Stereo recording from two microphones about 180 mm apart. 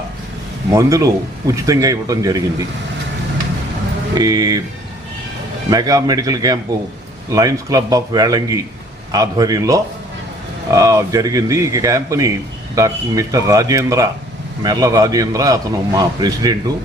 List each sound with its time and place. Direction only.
0.7 s a man's voice: 20° right (ahead or behind)
4.1 s a man's voice: 20° right (ahead or behind)
5.7 s a man's voice: 20° right (ahead or behind)